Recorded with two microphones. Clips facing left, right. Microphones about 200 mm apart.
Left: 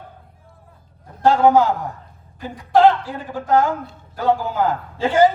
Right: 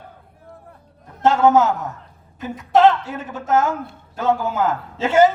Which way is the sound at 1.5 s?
25° right (ahead or behind).